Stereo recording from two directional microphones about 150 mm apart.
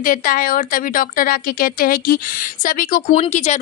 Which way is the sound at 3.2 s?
50° left (ahead or behind).